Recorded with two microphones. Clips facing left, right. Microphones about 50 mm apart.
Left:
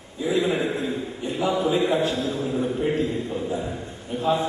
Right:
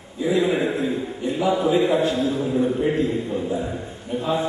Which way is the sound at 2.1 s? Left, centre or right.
Centre.